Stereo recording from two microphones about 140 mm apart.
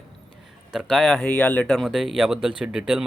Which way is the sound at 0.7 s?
5° right (ahead or behind).